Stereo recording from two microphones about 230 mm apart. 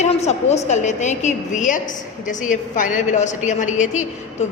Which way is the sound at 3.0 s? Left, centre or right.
Left.